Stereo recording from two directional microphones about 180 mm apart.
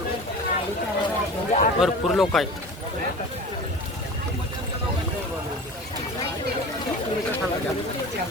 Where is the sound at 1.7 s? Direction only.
Centre (ahead or behind).